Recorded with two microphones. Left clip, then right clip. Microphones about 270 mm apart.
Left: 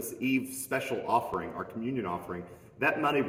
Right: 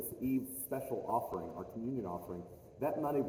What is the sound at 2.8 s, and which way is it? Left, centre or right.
Speech, left.